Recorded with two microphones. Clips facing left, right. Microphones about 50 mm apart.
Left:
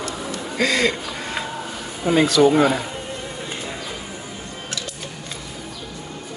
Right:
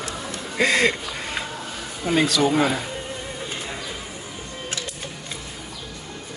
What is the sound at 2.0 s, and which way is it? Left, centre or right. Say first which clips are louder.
Speech: left 5 dB; centre.